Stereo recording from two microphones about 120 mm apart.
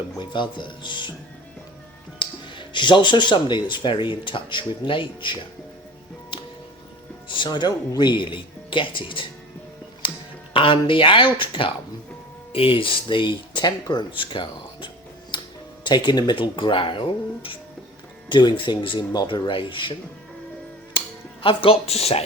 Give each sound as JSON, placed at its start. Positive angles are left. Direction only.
{"t": 0.2, "sound": "speech", "side_deg": 40}
{"t": 2.1, "sound": "speech", "side_deg": 40}
{"t": 7.3, "sound": "speech", "side_deg": 40}
{"t": 10.0, "sound": "music", "side_deg": 45}
{"t": 10.5, "sound": "speech", "side_deg": 45}
{"t": 15.3, "sound": "tick-tock", "side_deg": 40}
{"t": 15.8, "sound": "speech", "side_deg": 40}
{"t": 21.4, "sound": "speech", "side_deg": 50}